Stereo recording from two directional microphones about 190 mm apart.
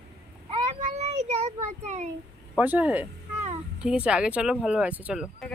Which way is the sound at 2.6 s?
10° right (ahead or behind).